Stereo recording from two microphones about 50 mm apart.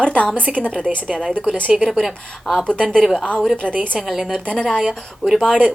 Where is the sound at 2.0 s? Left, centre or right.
Centre.